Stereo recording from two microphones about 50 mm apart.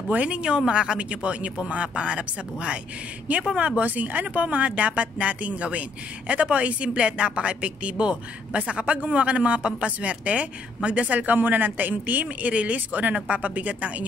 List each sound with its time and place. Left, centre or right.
0.1 s speech: right